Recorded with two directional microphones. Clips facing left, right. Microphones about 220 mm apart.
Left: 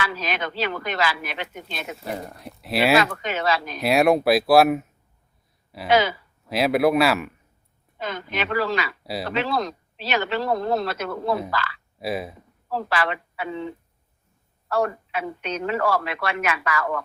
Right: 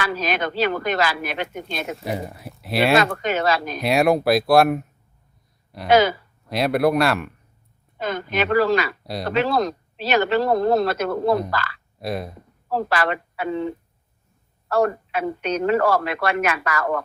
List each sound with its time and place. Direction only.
0.0 s speech: 45° right (ahead or behind)
2.0 s speech: 5° right (ahead or behind)
3.0 s speech: 45° right (ahead or behind)
3.8 s speech: centre (ahead or behind)
5.9 s speech: 45° right (ahead or behind)
6.4 s speech: centre (ahead or behind)
7.9 s speech: 45° right (ahead or behind)
11.9 s speech: 5° left (ahead or behind)
12.6 s a woman's voice: 45° right (ahead or behind)